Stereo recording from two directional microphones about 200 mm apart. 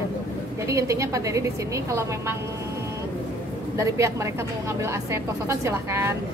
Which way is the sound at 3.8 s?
15° right (ahead or behind).